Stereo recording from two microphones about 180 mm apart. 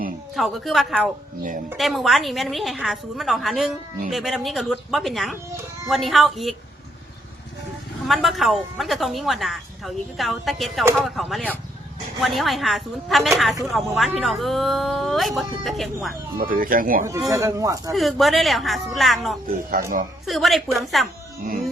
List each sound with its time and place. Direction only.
0.3 s speech: centre (ahead or behind)
8.0 s speech: centre (ahead or behind)
16.4 s speech: 50° right (ahead or behind)
17.2 s speech: 20° right (ahead or behind)
17.9 s speech: centre (ahead or behind)
19.8 s speech: 50° right (ahead or behind)
20.2 s speech: centre (ahead or behind)